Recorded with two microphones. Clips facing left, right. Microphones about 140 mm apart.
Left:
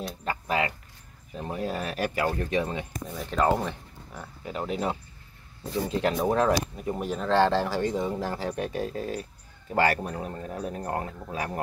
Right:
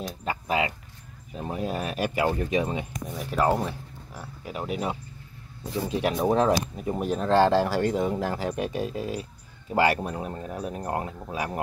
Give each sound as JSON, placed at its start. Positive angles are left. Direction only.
{"t": 0.2, "sound": "speech", "side_deg": -15}